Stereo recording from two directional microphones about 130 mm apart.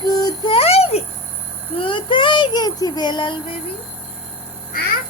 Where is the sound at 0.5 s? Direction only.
50° left (ahead or behind).